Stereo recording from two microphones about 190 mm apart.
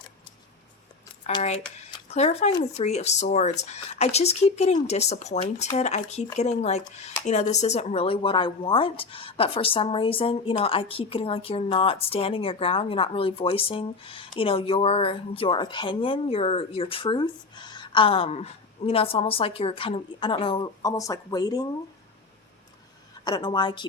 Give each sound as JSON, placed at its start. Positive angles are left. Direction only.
{"t": 1.4, "sound": "speech", "side_deg": 35}
{"t": 2.5, "sound": "speech", "side_deg": 20}
{"t": 2.8, "sound": "speech", "side_deg": 35}
{"t": 23.2, "sound": "speech", "side_deg": 20}